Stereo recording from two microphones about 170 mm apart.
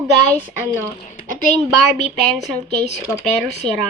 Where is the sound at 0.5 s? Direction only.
15° right (ahead or behind).